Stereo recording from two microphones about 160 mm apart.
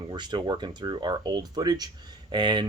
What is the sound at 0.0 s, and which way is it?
Speech, 30° right (ahead or behind).